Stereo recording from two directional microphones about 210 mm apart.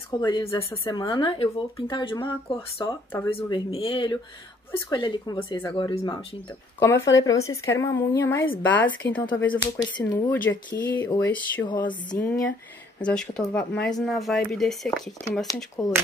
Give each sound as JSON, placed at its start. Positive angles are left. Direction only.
{"t": 0.2, "sound": "speech", "side_deg": 20}
{"t": 3.3, "sound": "speech", "side_deg": 25}
{"t": 11.6, "sound": "speech", "side_deg": 20}
{"t": 13.0, "sound": "speech", "side_deg": 5}
{"t": 15.4, "sound": "speech", "side_deg": 15}